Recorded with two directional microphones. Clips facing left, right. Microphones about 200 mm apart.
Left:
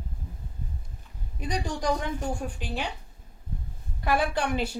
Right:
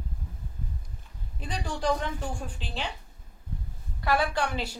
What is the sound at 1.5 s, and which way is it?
Speech, 15° left (ahead or behind).